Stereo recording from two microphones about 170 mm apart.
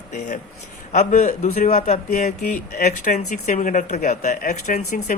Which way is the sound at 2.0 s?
55° left (ahead or behind).